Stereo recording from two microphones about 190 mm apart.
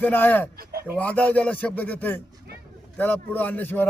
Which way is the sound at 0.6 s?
55° right (ahead or behind).